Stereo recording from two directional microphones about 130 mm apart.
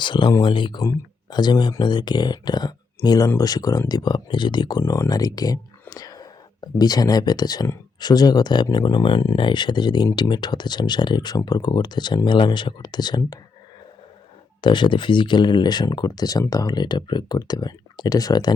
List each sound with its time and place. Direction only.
0.0 s speech: 35° left (ahead or behind)
4.8 s speech: 25° left (ahead or behind)
14.6 s speech: 35° left (ahead or behind)